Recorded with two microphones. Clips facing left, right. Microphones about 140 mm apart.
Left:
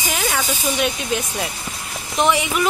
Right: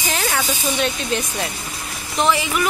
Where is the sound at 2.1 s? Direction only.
20° left (ahead or behind).